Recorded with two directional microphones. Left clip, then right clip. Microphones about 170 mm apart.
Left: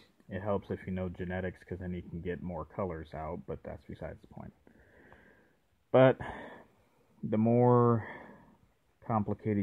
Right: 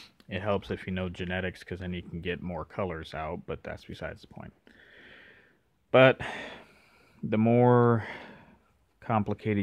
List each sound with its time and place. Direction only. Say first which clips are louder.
0.3 s speech: right 4 dB; 30° right (ahead or behind)
4.9 s sniff: right 7 dB; 20° right (ahead or behind)
5.9 s speech: right 4 dB; 20° right (ahead or behind)
7.4 s speech: right 4 dB; 40° right (ahead or behind)